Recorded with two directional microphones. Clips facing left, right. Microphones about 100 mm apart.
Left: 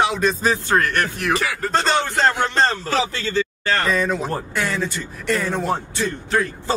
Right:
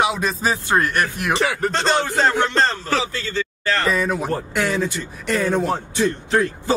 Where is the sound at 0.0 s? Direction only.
5° right (ahead or behind).